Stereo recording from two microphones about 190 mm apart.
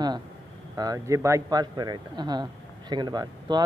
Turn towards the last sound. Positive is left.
turn(degrees=-20)  # may be behind; listen again after turning